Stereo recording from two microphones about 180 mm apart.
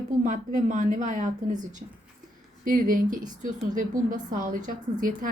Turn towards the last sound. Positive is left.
turn(degrees=-45)  # may be behind; listen again after turning